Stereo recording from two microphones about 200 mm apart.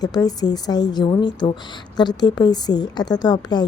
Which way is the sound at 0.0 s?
20° left (ahead or behind).